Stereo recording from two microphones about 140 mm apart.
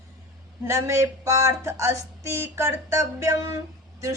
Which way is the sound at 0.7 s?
20° right (ahead or behind).